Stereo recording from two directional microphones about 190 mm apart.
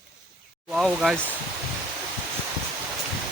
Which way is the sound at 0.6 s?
Centre (ahead or behind).